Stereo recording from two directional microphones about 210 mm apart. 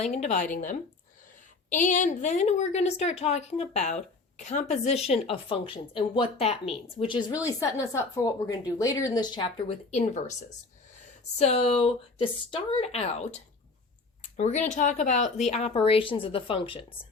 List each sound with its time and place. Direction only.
0.0 s a woman's voice: 30° left (ahead or behind)
1.8 s a woman's voice: 35° left (ahead or behind)
11.3 s a woman's voice: 30° left (ahead or behind)